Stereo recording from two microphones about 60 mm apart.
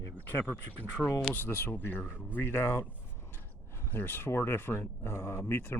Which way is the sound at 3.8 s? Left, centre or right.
Left.